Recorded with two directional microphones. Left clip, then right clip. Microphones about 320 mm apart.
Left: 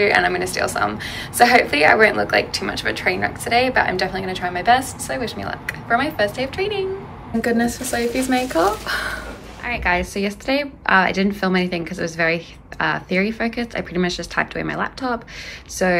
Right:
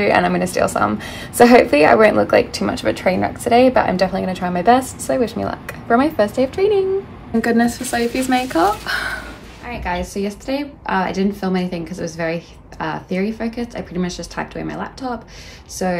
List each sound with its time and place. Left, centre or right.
0.0 s a woman's voice: centre
7.4 s a woman's voice: centre